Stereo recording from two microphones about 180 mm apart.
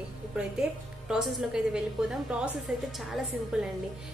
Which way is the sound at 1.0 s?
5° right (ahead or behind).